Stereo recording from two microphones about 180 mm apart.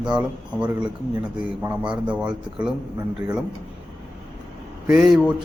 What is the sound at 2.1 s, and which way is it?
Speech, 5° right (ahead or behind).